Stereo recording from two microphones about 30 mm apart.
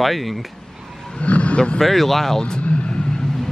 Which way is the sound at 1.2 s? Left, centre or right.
Left.